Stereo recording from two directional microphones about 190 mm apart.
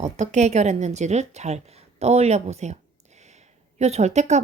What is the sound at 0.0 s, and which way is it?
A woman's voice, 35° right (ahead or behind).